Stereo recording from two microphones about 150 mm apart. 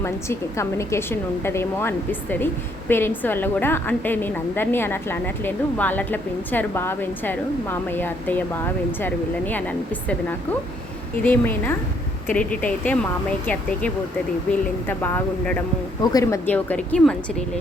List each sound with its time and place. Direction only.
0.0 s a woman's voice: 20° left (ahead or behind)
11.2 s a woman's voice: 15° left (ahead or behind)